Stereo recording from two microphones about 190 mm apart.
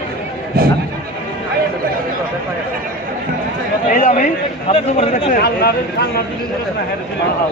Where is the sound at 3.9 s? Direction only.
45° left (ahead or behind).